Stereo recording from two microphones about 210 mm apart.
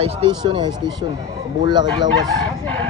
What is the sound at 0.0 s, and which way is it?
Speech, 25° right (ahead or behind).